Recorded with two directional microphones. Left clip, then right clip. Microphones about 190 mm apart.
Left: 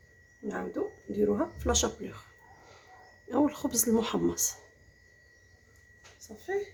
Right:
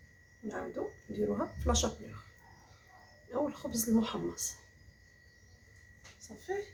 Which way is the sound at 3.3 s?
50° left (ahead or behind).